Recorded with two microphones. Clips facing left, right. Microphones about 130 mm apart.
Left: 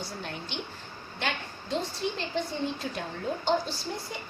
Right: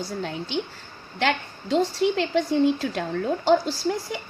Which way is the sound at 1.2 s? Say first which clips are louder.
Right 9 dB; 90° right.